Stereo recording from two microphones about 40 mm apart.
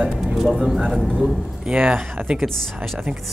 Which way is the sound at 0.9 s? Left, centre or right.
Centre.